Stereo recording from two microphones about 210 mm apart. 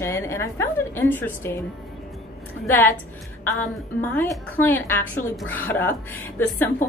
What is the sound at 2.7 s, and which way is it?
A woman's voice, 10° left (ahead or behind).